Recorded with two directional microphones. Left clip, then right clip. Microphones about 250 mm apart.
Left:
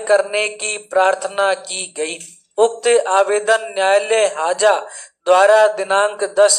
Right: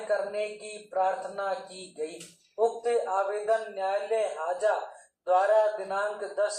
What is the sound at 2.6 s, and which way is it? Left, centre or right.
A man's voice, left.